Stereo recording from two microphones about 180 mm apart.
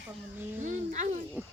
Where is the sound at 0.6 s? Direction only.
45° right (ahead or behind).